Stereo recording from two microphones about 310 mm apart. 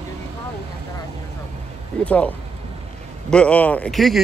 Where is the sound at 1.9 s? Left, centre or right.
Centre.